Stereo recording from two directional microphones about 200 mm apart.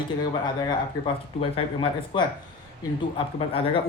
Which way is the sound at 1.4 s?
25° left (ahead or behind).